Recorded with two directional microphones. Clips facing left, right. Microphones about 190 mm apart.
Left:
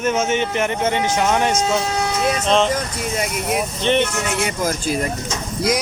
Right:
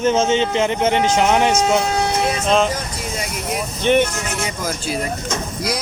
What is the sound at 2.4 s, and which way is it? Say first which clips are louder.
Speech: even; 5° right (ahead or behind).